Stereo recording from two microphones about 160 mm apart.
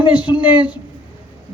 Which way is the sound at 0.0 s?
30° left (ahead or behind).